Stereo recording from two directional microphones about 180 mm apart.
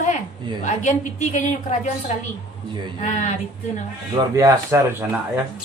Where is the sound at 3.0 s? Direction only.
40° left (ahead or behind).